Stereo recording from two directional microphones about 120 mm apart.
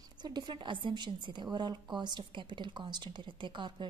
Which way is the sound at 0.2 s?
35° right (ahead or behind).